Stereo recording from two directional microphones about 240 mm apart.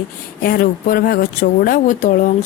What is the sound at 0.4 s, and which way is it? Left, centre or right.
Speech, left.